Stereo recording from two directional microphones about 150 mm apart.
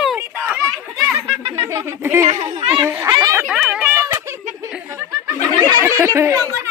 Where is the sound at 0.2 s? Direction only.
15° right (ahead or behind).